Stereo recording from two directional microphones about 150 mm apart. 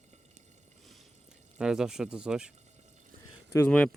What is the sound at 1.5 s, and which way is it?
Speech, 5° right (ahead or behind).